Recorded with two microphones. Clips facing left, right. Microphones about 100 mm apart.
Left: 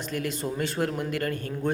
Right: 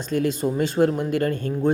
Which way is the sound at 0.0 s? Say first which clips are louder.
Right 8 dB; 25° right (ahead or behind).